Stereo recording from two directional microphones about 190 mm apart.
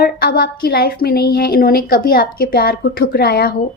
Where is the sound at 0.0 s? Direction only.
50° left (ahead or behind).